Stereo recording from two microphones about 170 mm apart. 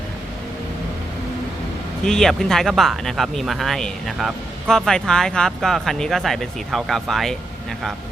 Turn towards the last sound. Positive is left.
turn(degrees=0)  # may be behind; listen again after turning